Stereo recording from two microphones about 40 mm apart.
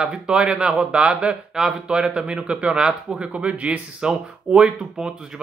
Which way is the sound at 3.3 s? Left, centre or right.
Right.